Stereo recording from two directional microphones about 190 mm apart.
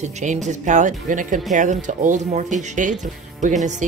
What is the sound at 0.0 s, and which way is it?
Speech, 40° right (ahead or behind).